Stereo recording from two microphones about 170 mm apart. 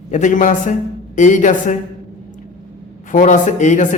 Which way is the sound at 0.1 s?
45° left (ahead or behind).